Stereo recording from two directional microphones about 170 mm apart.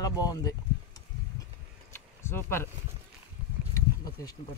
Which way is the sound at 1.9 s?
15° left (ahead or behind).